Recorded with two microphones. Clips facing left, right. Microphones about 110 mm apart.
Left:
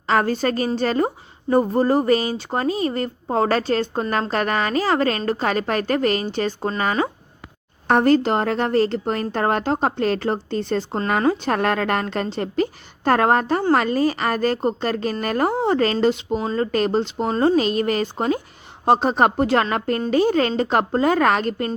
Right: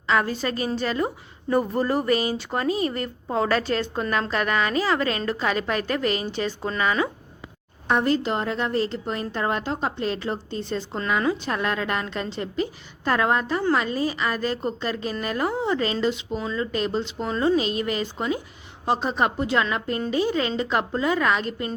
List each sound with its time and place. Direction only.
0.1 s speech: 45° left (ahead or behind)
7.9 s a woman's voice: 55° left (ahead or behind)
10.9 s speech: 45° left (ahead or behind)
11.4 s a woman's voice: 60° left (ahead or behind)
18.9 s a woman's voice: 65° left (ahead or behind)